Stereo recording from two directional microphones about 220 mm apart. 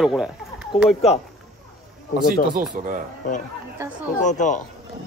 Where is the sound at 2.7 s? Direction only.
40° right (ahead or behind).